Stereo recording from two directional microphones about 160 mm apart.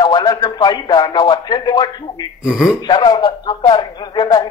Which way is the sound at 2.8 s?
25° left (ahead or behind).